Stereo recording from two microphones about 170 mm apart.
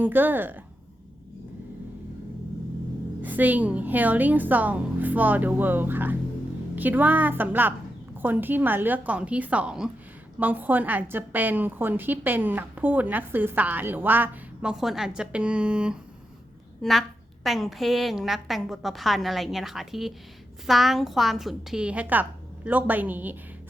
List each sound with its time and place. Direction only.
0.0 s a woman's voice: 10° right (ahead or behind)
3.2 s a woman's voice: 10° right (ahead or behind)